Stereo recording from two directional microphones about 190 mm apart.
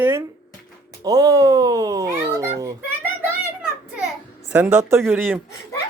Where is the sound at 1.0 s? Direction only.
20° right (ahead or behind).